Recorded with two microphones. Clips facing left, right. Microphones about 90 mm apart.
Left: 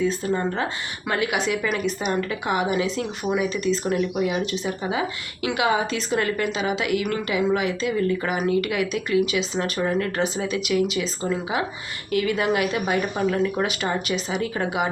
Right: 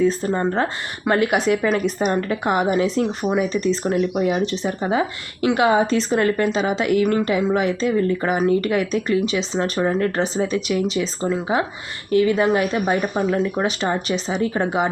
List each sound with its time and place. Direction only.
0.2 s a woman's voice: 35° right (ahead or behind)
13.0 s a woman's voice: 25° right (ahead or behind)